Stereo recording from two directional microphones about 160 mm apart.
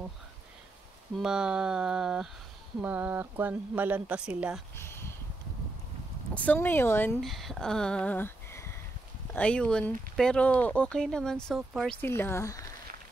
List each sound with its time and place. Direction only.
1.1 s speech: 5° right (ahead or behind)
4.7 s a sound: 15° left (ahead or behind)
6.3 s speech: 10° left (ahead or behind)
7.2 s speech: centre (ahead or behind)
12.0 s speech: 15° left (ahead or behind)